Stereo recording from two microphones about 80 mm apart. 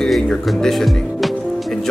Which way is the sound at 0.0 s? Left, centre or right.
Centre.